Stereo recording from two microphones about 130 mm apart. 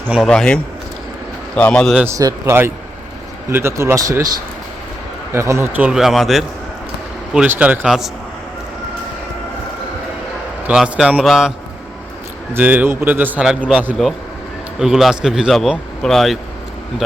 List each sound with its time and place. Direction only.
0.3 s a man's voice: 5° left (ahead or behind)
2.0 s speech: 25° right (ahead or behind)
5.3 s speech: 20° right (ahead or behind)
5.9 s a man's voice: centre (ahead or behind)
7.3 s a man's voice: 10° right (ahead or behind)
7.9 s a man's voice: centre (ahead or behind)
10.7 s a man's voice: 5° right (ahead or behind)
12.5 s a man's voice: 15° right (ahead or behind)
14.0 s a man's voice: centre (ahead or behind)